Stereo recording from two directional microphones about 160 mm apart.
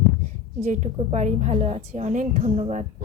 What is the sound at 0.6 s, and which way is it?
A woman's voice, 45° right (ahead or behind).